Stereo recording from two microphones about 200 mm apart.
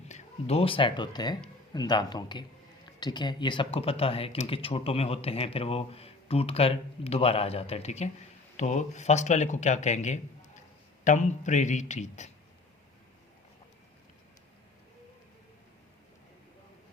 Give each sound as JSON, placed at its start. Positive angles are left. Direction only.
{"t": 0.1, "sound": "speech", "side_deg": 35}